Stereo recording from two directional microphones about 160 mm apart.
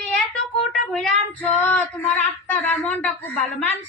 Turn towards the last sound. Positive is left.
turn(degrees=10)  # may be behind; listen again after turning